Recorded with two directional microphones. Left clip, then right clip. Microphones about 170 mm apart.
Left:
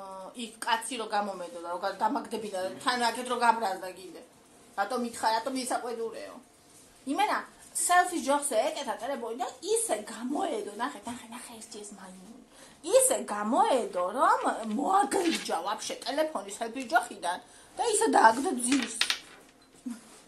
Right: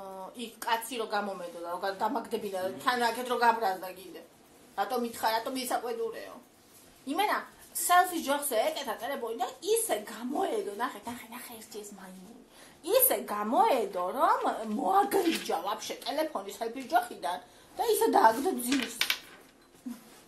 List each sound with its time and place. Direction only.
0.4 s speech: 10° left (ahead or behind)
7.1 s speech: 10° left (ahead or behind)
12.8 s speech: 10° left (ahead or behind)